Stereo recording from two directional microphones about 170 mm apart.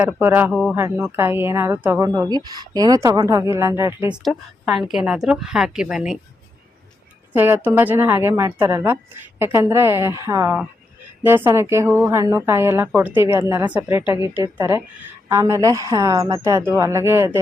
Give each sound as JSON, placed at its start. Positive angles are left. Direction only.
{"t": 0.0, "sound": "a woman's voice", "side_deg": -10}
{"t": 0.8, "sound": "a woman's voice", "side_deg": -15}
{"t": 4.1, "sound": "a woman's voice", "side_deg": -5}
{"t": 7.3, "sound": "a woman's voice", "side_deg": -10}